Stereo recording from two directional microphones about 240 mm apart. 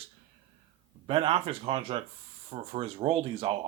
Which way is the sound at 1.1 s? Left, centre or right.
Right.